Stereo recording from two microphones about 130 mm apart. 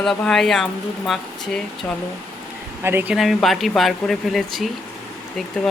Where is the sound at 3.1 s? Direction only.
Centre (ahead or behind).